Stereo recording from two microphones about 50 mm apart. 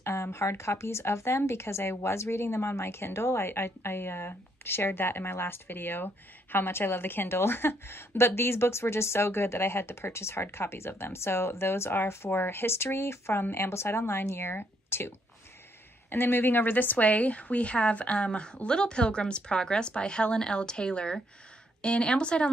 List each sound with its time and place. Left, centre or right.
0.0 s a woman's voice: left